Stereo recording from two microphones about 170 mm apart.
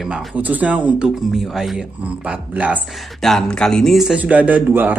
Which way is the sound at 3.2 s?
Centre (ahead or behind).